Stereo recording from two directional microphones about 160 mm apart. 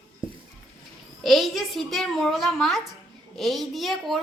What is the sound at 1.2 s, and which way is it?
A child's voice, centre (ahead or behind).